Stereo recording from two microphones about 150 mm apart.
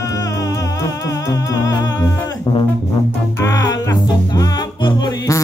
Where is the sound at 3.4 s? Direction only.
20° left (ahead or behind).